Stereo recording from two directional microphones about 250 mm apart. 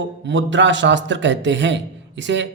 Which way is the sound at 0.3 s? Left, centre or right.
Right.